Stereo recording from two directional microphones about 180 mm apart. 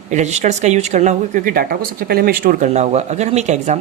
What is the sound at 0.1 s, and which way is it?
Speech, 40° right (ahead or behind).